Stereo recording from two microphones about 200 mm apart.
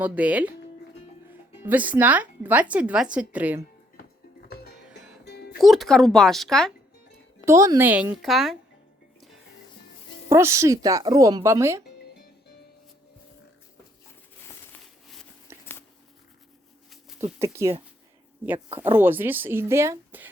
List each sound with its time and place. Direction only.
0.0 s speech: 5° right (ahead or behind)
5.2 s music: 55° left (ahead or behind)
5.5 s speech: centre (ahead or behind)
7.4 s speech: 15° right (ahead or behind)
10.2 s speech: 15° right (ahead or behind)
14.4 s a sound: 5° left (ahead or behind)
15.5 s a sound: 10° right (ahead or behind)
17.2 s speech: 15° right (ahead or behind)